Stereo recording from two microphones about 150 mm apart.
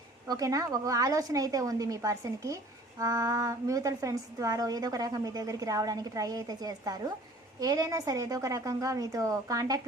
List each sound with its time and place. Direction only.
0.3 s a woman's voice: 25° right (ahead or behind)